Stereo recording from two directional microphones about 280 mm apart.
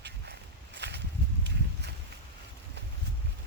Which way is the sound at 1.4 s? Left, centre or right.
Right.